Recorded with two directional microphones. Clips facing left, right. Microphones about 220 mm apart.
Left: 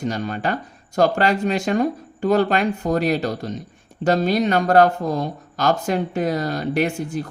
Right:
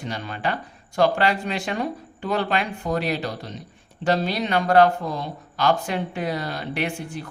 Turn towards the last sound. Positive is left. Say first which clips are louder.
# left 6 dB
turn(degrees=40)  # may be behind; listen again after turning